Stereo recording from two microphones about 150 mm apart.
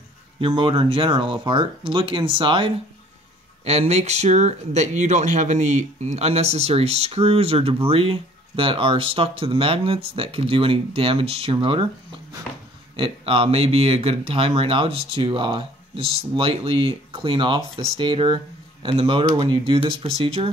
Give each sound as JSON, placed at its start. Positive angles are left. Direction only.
{"t": 0.4, "sound": "speech", "side_deg": -35}
{"t": 3.6, "sound": "speech", "side_deg": -45}
{"t": 12.9, "sound": "speech", "side_deg": -35}